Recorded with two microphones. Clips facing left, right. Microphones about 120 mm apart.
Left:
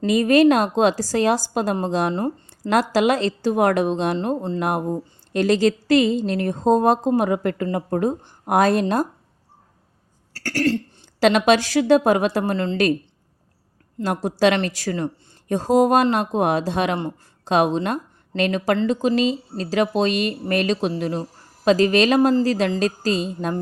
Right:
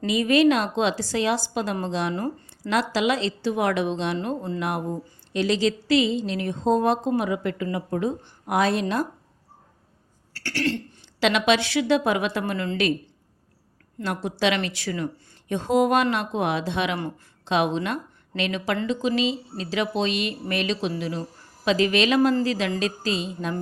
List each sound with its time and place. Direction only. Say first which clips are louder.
0.0 s a woman's voice: left 4 dB; 45° left (ahead or behind)
4.6 s a woman's voice: left 5 dB; 45° left (ahead or behind)
10.3 s throat clearing: left 5 dB; 45° left (ahead or behind)
11.2 s a woman's voice: left 5 dB; 40° left (ahead or behind)
14.0 s a woman's voice: left 6 dB; 40° left (ahead or behind)